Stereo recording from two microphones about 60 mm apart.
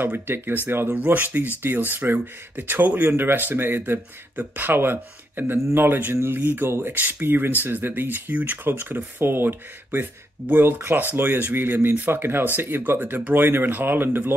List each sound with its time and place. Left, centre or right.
0.0 s speech: right